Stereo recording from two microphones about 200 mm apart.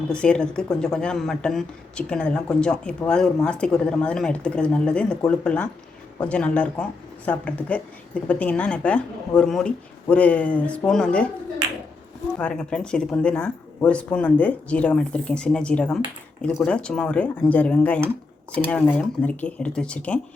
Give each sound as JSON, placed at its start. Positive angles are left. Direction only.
{"t": 0.1, "sound": "speech", "side_deg": 5}
{"t": 12.4, "sound": "speech", "side_deg": 5}